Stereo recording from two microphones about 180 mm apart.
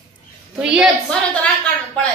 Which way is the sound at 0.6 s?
5° right (ahead or behind).